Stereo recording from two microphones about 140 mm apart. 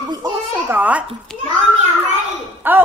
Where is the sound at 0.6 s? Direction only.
10° right (ahead or behind).